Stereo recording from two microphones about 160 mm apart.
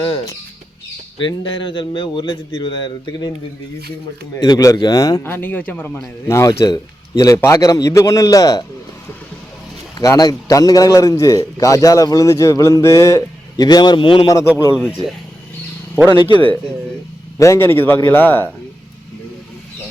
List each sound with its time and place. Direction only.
1.2 s speech: 30° left (ahead or behind)
4.4 s a man's voice: 20° left (ahead or behind)
10.0 s a man's voice: 20° left (ahead or behind)
14.8 s speech: 5° right (ahead or behind)
16.0 s a man's voice: 30° left (ahead or behind)
17.3 s a man's voice: 20° left (ahead or behind)